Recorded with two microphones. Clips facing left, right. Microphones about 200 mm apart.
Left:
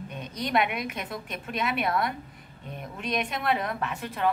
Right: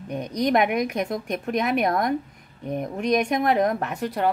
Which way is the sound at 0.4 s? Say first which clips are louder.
Right 6 dB; 45° right (ahead or behind).